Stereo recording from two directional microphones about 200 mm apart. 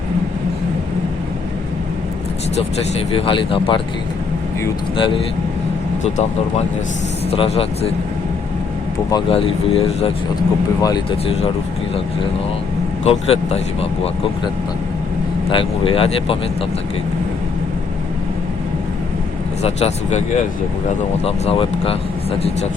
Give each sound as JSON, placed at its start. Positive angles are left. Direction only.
{"t": 3.2, "sound": "speech", "side_deg": 25}
{"t": 4.9, "sound": "speech", "side_deg": 25}
{"t": 7.3, "sound": "speech", "side_deg": 30}
{"t": 9.0, "sound": "speech", "side_deg": 25}
{"t": 10.8, "sound": "speech", "side_deg": 20}
{"t": 13.1, "sound": "speech", "side_deg": 30}
{"t": 15.4, "sound": "speech", "side_deg": 25}
{"t": 19.6, "sound": "speech", "side_deg": 35}
{"t": 21.2, "sound": "speech", "side_deg": 30}